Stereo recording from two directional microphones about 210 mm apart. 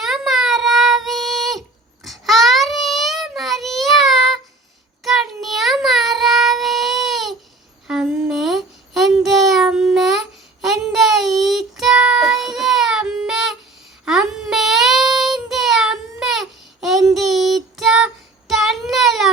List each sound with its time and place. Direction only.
0.0 s child singing: centre (ahead or behind)